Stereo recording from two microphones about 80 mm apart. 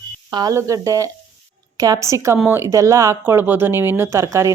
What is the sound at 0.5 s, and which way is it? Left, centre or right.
Speech, right.